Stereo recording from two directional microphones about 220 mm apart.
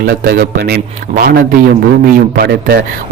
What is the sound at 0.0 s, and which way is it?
Speech, 45° right (ahead or behind).